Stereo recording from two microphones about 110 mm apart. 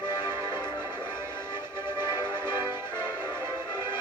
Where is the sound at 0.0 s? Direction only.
40° left (ahead or behind).